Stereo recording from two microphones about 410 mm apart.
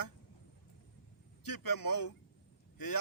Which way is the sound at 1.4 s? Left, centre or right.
Left.